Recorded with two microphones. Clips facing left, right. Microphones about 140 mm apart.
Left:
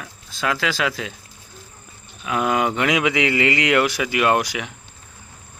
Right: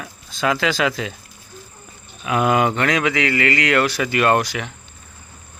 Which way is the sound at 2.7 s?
15° left (ahead or behind).